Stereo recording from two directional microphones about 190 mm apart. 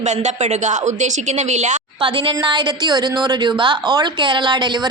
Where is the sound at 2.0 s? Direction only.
25° right (ahead or behind).